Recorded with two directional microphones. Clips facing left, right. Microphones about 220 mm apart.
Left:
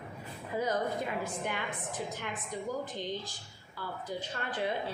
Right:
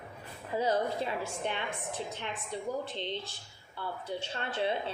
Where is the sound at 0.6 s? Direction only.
30° right (ahead or behind).